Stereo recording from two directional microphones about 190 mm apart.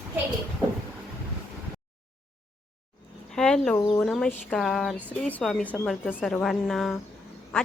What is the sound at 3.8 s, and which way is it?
A woman's voice, 10° left (ahead or behind).